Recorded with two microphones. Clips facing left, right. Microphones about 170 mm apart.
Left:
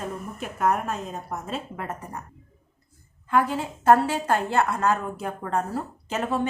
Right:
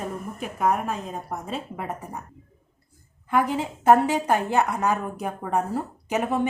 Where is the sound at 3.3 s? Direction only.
15° right (ahead or behind).